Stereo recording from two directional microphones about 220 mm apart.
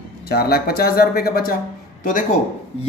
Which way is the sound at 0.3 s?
45° left (ahead or behind).